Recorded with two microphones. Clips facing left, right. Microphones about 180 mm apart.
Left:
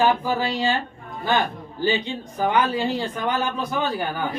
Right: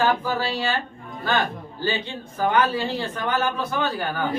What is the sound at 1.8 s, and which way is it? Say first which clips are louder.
Speech: left 4 dB; 15° left (ahead or behind).